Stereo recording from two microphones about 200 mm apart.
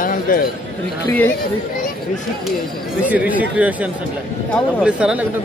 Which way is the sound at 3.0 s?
5° right (ahead or behind).